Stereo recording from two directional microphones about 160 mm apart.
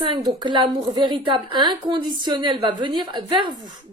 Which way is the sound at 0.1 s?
30° right (ahead or behind).